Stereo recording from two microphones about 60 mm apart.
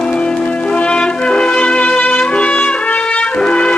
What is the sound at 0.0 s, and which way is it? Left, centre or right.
Music, centre.